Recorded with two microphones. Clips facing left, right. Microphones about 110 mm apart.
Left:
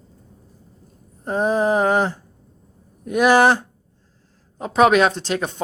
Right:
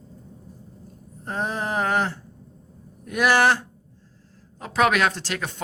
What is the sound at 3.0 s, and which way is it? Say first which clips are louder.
Speech: left 5 dB; 20° left (ahead or behind).